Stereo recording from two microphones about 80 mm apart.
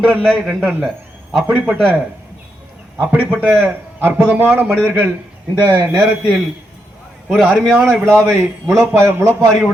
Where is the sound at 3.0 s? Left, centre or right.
Centre.